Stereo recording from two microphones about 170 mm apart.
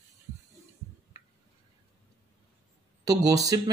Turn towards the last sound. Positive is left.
turn(degrees=-20)  # may be behind; listen again after turning